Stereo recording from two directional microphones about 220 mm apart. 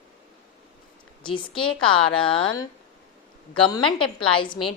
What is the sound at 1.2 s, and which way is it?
A woman's voice, 20° left (ahead or behind).